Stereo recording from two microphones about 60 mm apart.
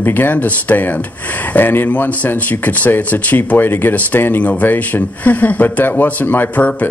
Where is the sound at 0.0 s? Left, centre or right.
Left.